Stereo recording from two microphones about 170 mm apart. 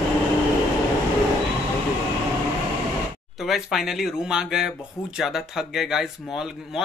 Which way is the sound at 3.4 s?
Centre (ahead or behind).